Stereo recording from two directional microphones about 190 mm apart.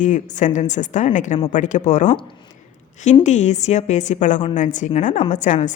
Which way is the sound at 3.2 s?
40° left (ahead or behind).